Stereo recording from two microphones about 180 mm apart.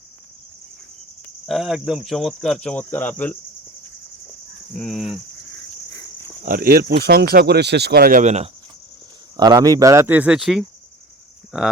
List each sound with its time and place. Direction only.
1.5 s speech: centre (ahead or behind)
4.7 s speech: 5° left (ahead or behind)
6.4 s speech: 50° right (ahead or behind)
9.4 s speech: 20° right (ahead or behind); by 10.7 s centre (ahead or behind)